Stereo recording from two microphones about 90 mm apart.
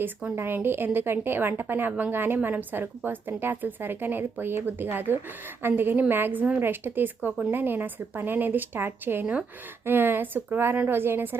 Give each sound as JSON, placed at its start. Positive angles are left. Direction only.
{"t": 0.0, "sound": "a woman's voice", "side_deg": -20}